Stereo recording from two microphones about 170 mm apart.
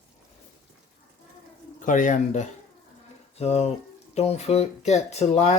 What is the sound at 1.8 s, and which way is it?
Speech, 50° left (ahead or behind).